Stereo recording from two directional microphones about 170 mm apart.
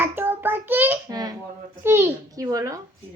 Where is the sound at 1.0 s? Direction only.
25° right (ahead or behind).